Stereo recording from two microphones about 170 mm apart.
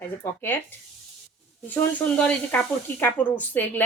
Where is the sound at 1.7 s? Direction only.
10° left (ahead or behind).